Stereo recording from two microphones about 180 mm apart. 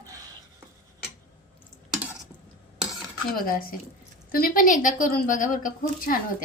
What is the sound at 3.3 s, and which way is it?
A woman's voice, 55° left (ahead or behind).